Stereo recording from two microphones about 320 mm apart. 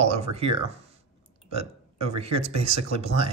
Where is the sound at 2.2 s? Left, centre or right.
Centre.